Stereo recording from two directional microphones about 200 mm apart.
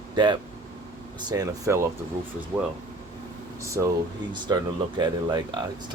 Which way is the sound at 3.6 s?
15° right (ahead or behind).